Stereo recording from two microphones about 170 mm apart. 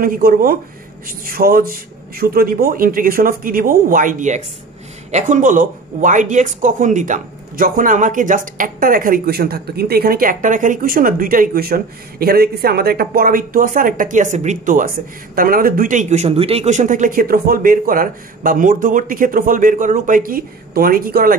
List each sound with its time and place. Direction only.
0.0 s speech: 55° right (ahead or behind)